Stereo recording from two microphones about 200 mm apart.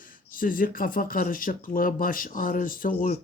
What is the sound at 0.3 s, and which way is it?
Speech, 45° left (ahead or behind).